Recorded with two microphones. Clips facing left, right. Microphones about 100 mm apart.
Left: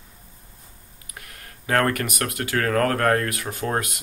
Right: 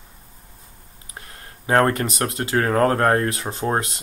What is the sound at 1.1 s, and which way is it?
Speech, 30° right (ahead or behind).